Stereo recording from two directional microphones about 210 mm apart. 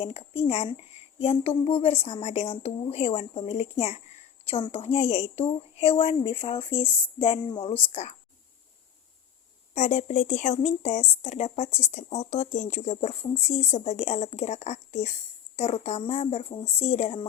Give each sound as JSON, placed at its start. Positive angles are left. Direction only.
{"t": 0.0, "sound": "a woman's voice", "side_deg": 30}
{"t": 9.7, "sound": "speech", "side_deg": 35}